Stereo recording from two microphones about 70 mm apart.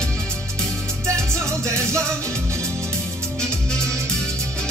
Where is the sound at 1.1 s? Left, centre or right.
Right.